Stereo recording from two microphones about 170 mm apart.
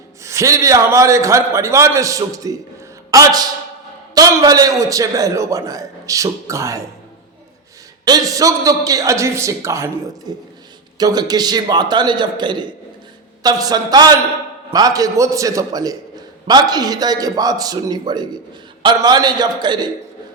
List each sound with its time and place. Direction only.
0.2 s a man's voice: 15° right (ahead or behind)
8.0 s a man's voice: 20° right (ahead or behind)